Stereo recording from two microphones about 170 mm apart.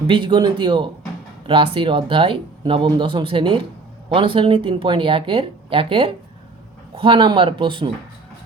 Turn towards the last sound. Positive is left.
turn(degrees=-30)  # may be behind; listen again after turning